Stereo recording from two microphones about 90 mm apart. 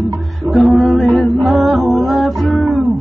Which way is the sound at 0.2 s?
Centre (ahead or behind).